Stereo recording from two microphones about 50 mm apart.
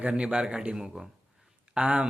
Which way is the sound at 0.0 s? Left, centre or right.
Right.